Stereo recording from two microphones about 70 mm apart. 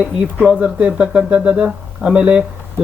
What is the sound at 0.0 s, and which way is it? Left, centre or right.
Speech, centre.